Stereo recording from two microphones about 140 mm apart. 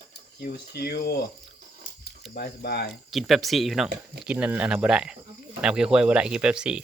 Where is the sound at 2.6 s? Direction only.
90° left.